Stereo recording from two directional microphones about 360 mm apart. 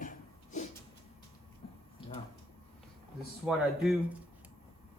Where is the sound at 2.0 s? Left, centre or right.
Centre.